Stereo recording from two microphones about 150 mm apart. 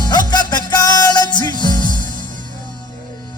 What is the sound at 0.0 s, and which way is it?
Music, 25° left (ahead or behind).